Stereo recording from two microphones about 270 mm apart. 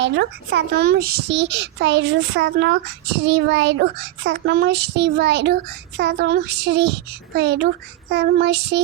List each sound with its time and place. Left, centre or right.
0.0 s a child's voice: right